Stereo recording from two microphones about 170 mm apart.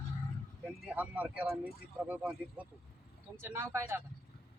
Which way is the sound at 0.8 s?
5° right (ahead or behind).